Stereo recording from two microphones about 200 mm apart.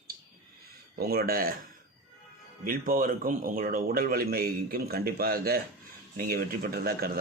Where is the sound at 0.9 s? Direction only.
50° right (ahead or behind).